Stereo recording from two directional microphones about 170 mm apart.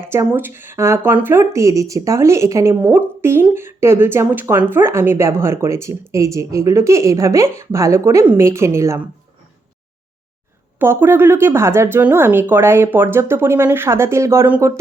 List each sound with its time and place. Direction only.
0.0 s speech: 15° right (ahead or behind)
10.8 s speech: 15° right (ahead or behind)